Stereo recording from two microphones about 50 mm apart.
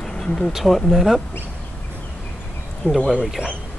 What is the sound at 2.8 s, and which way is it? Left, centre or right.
Speech, left.